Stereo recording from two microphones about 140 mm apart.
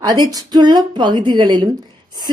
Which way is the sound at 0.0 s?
30° right (ahead or behind).